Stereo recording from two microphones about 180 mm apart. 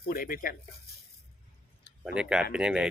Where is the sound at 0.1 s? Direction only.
50° left (ahead or behind).